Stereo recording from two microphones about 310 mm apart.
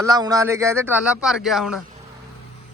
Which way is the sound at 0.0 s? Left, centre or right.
Centre.